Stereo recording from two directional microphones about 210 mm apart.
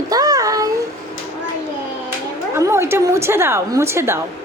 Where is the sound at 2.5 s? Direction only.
15° right (ahead or behind).